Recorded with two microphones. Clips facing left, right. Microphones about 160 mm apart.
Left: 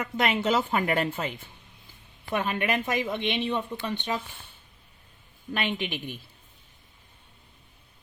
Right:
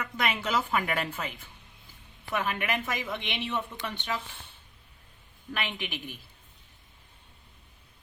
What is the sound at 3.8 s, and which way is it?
Speech, 20° left (ahead or behind).